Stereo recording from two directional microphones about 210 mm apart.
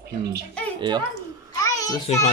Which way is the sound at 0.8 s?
20° right (ahead or behind).